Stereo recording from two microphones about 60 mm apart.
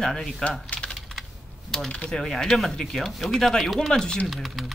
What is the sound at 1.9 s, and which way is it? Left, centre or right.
Speech, centre.